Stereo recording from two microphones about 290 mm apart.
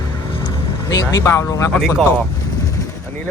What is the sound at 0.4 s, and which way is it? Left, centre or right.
Speech, centre.